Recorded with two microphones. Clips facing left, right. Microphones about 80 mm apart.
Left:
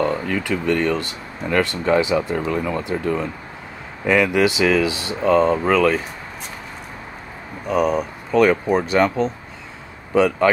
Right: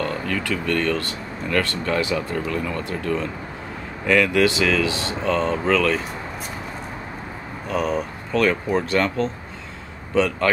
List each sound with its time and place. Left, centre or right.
0.0 s speech: centre
7.6 s speech: centre